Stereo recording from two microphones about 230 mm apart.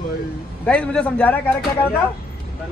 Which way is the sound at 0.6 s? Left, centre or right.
Centre.